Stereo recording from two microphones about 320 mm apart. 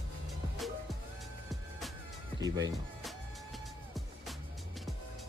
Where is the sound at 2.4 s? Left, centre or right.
Centre.